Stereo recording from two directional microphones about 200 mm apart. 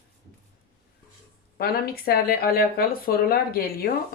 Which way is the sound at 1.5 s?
50° left (ahead or behind).